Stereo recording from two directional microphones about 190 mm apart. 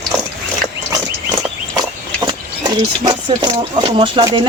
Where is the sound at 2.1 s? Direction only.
20° right (ahead or behind).